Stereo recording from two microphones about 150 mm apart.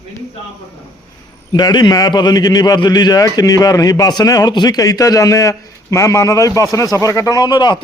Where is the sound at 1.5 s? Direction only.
30° left (ahead or behind).